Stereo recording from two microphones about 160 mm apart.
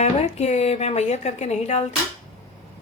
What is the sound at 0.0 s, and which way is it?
Speech, 45° left (ahead or behind).